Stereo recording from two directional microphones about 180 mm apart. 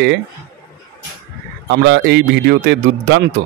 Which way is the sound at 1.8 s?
70° right (ahead or behind).